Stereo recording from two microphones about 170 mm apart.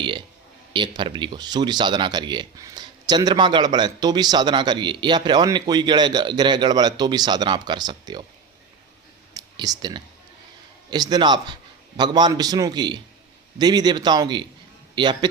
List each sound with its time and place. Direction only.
0.7 s speech: 30° right (ahead or behind)
9.3 s clicking: 25° right (ahead or behind)
10.9 s speech: 25° right (ahead or behind)